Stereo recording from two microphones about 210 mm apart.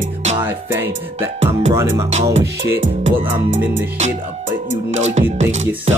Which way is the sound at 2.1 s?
30° right (ahead or behind).